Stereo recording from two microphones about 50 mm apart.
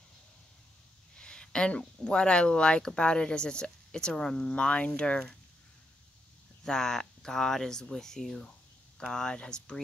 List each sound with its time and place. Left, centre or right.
1.1 s a sound: centre
2.0 s speech: centre
6.6 s speech: centre